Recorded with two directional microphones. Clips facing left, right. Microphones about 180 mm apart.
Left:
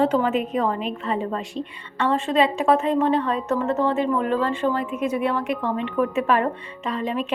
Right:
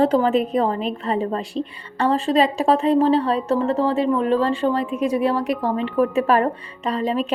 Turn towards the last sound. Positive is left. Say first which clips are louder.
# right 4 dB
turn(degrees=-35)  # may be behind; listen again after turning